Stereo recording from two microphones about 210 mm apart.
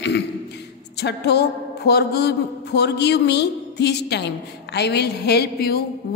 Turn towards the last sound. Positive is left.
turn(degrees=50)  # may be behind; listen again after turning